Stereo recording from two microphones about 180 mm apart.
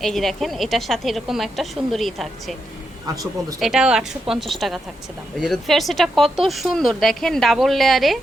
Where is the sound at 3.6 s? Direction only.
5° right (ahead or behind).